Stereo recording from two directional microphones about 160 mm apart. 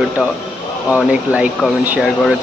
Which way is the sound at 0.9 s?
10° right (ahead or behind).